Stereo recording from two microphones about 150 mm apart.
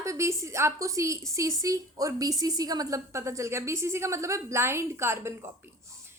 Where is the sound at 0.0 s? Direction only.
20° right (ahead or behind).